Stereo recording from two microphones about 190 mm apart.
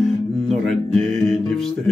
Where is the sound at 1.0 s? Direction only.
Centre (ahead or behind).